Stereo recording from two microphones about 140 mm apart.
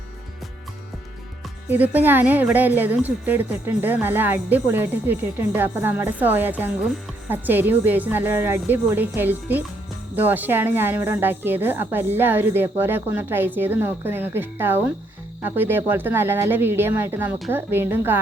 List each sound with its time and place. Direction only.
1.7 s a woman's voice: 15° right (ahead or behind)